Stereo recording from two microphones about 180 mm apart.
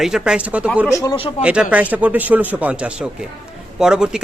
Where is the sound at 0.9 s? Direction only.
20° left (ahead or behind).